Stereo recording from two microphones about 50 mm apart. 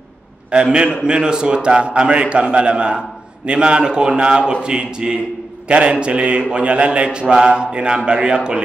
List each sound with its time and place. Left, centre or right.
0.5 s a man's voice: centre